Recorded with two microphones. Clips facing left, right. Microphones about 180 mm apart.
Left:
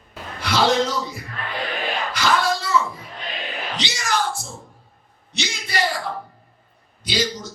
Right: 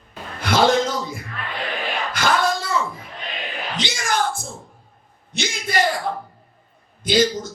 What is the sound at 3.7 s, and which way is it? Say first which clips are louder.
Bellow: right 2 dB; 50° right (ahead or behind).